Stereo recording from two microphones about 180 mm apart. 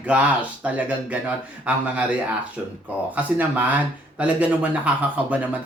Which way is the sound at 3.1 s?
10° right (ahead or behind).